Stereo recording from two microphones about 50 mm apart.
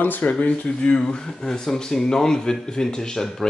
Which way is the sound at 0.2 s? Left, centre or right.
Left.